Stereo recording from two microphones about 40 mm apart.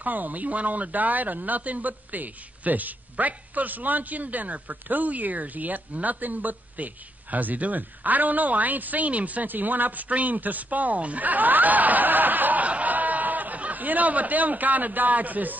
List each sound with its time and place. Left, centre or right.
0.0 s speech: right